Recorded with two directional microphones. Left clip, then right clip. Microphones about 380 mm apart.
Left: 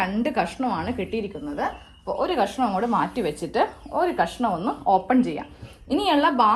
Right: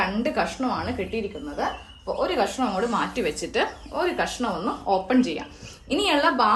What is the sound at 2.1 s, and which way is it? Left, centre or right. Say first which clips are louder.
A woman's voice: left 1 dB; centre.